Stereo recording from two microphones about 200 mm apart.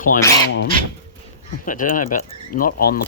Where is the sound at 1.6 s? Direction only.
40° left (ahead or behind).